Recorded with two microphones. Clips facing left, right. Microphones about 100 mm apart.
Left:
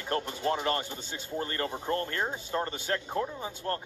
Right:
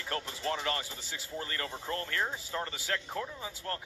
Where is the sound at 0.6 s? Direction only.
25° left (ahead or behind).